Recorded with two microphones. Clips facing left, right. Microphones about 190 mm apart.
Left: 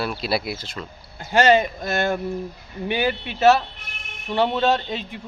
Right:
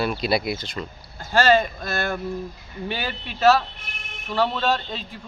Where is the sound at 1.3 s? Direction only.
20° left (ahead or behind).